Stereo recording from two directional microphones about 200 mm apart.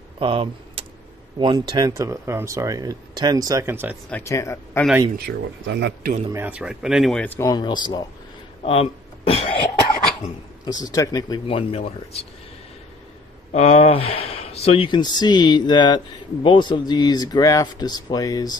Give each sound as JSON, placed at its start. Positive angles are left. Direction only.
{"t": 0.2, "sound": "speech", "side_deg": -25}
{"t": 4.1, "sound": "speech", "side_deg": 15}
{"t": 5.2, "sound": "speech", "side_deg": -60}
{"t": 6.3, "sound": "speech", "side_deg": -10}
{"t": 8.6, "sound": "cough", "side_deg": 30}
{"t": 10.6, "sound": "speech", "side_deg": 20}
{"t": 13.5, "sound": "speech", "side_deg": 35}